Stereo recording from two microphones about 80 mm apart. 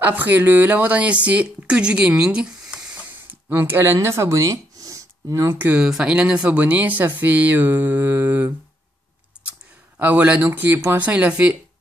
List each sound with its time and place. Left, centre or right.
0.0 s speech: right
3.3 s speech: right
5.6 s speech: centre
9.9 s speech: centre
11.0 s speech: centre